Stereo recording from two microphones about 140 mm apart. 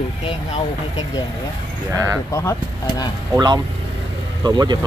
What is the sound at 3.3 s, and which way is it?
Speech, 30° right (ahead or behind).